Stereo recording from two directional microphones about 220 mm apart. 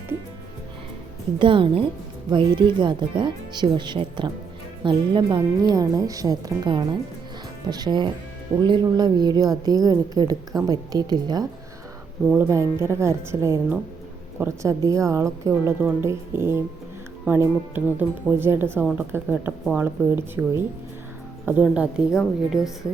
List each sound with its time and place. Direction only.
1.4 s a woman's voice: 20° right (ahead or behind); by 22.7 s centre (ahead or behind)